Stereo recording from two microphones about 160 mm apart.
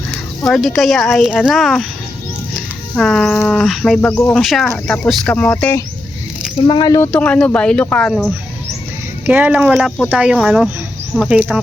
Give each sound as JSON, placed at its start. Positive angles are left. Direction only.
{"t": 0.1, "sound": "speech", "side_deg": 0}
{"t": 6.6, "sound": "speech", "side_deg": 30}
{"t": 7.1, "sound": "speech", "side_deg": 10}
{"t": 9.2, "sound": "speech", "side_deg": -10}